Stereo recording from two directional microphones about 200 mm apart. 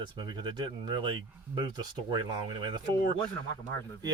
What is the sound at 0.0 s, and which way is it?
Speech, 20° right (ahead or behind).